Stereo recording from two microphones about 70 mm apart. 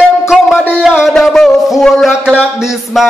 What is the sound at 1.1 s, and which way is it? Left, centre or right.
Speech, centre.